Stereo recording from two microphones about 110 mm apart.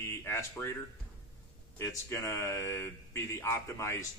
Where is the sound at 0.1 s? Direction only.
25° left (ahead or behind).